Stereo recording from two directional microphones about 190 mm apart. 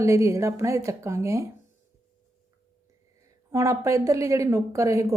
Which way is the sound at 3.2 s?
15° right (ahead or behind).